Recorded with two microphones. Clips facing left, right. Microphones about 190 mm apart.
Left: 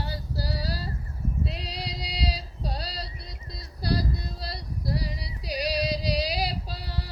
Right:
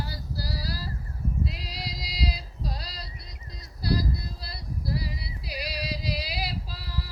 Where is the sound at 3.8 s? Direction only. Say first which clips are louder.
Even; 35° left (ahead or behind).